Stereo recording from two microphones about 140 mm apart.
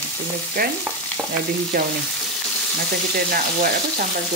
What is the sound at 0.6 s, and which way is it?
Speech, 90° right.